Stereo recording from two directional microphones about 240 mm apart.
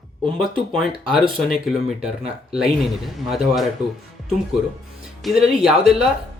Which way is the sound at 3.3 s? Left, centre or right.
Centre.